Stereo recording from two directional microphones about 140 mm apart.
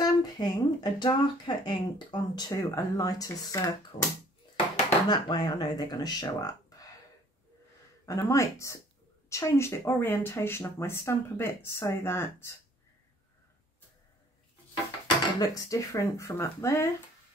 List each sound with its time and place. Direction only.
0.0 s speech: 30° left (ahead or behind)
3.9 s speech: 45° left (ahead or behind)
5.0 s speech: 30° left (ahead or behind)
8.0 s speech: 20° left (ahead or behind)
15.3 s speech: 25° left (ahead or behind)